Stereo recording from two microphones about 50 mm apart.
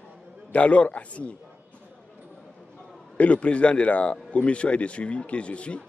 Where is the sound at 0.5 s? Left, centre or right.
Left.